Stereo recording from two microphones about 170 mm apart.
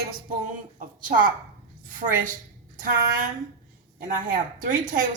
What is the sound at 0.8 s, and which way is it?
Speech, 55° right (ahead or behind).